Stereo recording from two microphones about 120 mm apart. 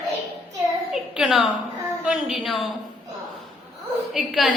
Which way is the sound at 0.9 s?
5° right (ahead or behind).